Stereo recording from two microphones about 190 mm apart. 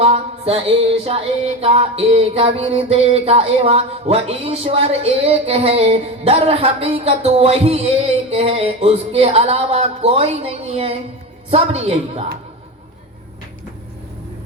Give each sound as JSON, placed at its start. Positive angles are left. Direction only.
{"t": 0.0, "sound": "music", "side_deg": -30}